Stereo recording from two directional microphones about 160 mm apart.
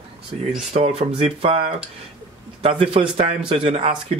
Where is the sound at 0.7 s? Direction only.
40° right (ahead or behind).